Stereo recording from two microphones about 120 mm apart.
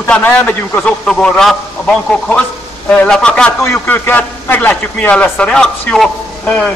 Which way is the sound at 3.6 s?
20° left (ahead or behind).